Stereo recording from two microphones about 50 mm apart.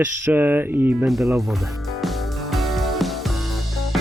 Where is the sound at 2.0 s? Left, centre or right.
Centre.